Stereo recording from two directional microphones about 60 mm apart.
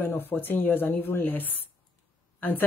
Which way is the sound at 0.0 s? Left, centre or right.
Left.